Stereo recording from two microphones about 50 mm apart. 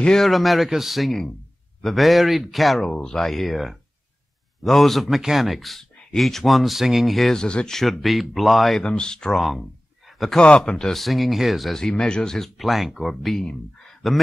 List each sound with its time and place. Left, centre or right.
0.0 s speech: centre
0.3 s speech: centre
2.8 s speech: centre
3.2 s speech: centre
7.3 s speech: centre
7.7 s speech: centre
8.8 s speech: centre
9.4 s speech: centre
10.3 s speech: centre
11.8 s speech: centre
12.4 s speech: centre
13.8 s a sound: centre